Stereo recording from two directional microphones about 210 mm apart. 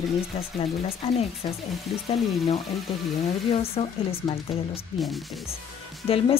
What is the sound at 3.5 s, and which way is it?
Speech, 30° left (ahead or behind).